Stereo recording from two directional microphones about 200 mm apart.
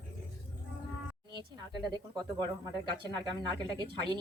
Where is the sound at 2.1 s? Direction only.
20° right (ahead or behind).